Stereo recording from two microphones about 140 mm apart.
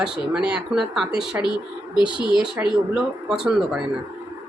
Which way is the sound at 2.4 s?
5° right (ahead or behind).